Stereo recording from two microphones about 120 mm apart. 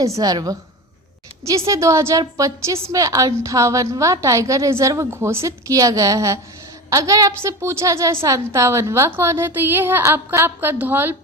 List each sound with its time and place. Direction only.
0.0 s a woman's voice: 30° right (ahead or behind)